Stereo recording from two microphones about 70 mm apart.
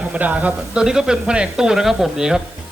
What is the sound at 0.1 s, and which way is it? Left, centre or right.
A man's voice, right.